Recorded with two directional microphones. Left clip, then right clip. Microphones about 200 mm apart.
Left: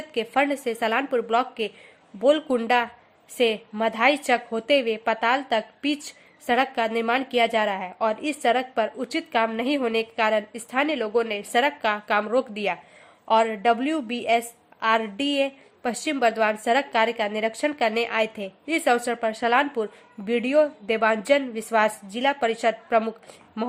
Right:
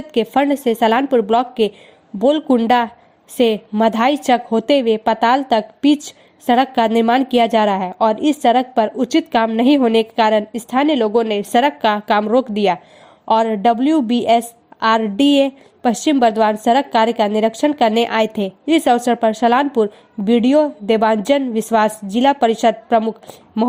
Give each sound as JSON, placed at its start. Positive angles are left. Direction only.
{"t": 0.1, "sound": "a woman's voice", "side_deg": -40}